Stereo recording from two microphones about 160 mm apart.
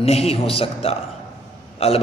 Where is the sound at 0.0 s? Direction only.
40° left (ahead or behind).